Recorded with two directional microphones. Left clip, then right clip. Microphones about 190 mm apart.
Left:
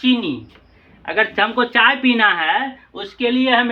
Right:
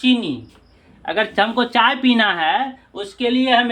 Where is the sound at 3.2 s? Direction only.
25° right (ahead or behind).